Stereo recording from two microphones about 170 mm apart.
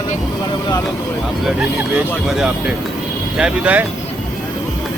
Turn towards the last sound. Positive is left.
turn(degrees=-10)  # may be behind; listen again after turning